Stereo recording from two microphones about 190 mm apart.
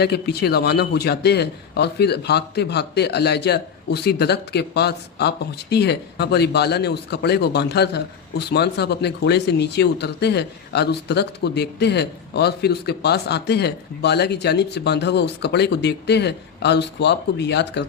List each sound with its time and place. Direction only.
0.0 s a man's voice: 60° left (ahead or behind)